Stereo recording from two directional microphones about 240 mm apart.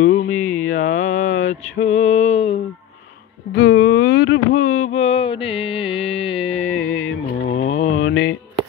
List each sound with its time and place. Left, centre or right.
0.0 s a sound: left
0.6 s mantra: left
1.0 s mantra: left
3.8 s a sound: left
4.8 s mantra: left
6.7 s music: left
7.4 s mantra: left
8.0 s mantra: left